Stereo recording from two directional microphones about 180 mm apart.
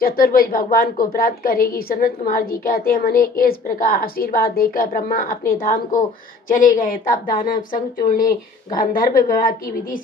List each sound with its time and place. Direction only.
0.0 s a woman's voice: 55° left (ahead or behind)